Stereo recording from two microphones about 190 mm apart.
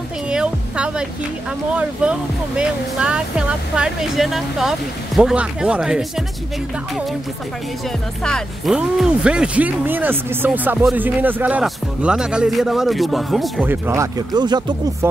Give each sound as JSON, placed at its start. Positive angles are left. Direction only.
{"t": 0.3, "sound": "music", "side_deg": -5}
{"t": 1.7, "sound": "speech", "side_deg": -5}
{"t": 8.2, "sound": "speech", "side_deg": 0}
{"t": 13.7, "sound": "speech", "side_deg": -15}